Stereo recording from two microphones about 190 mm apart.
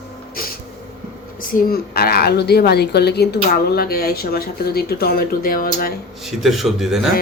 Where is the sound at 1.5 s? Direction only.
50° left (ahead or behind).